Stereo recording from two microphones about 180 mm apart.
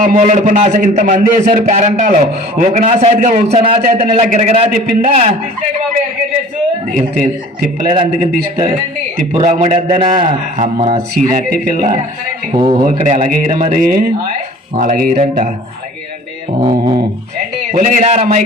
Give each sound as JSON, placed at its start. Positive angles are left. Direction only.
{"t": 0.0, "sound": "a man's voice", "side_deg": -45}
{"t": 7.9, "sound": "a man's voice", "side_deg": -35}
{"t": 11.1, "sound": "speech", "side_deg": -50}
{"t": 15.1, "sound": "a man's voice", "side_deg": -40}
{"t": 16.6, "sound": "mantra", "side_deg": -25}
{"t": 17.7, "sound": "a man's voice", "side_deg": -45}